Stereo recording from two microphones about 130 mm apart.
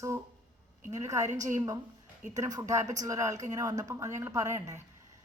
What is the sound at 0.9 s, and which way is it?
A woman's voice, 25° right (ahead or behind).